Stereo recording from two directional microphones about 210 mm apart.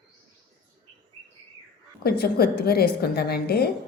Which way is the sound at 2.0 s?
45° left (ahead or behind).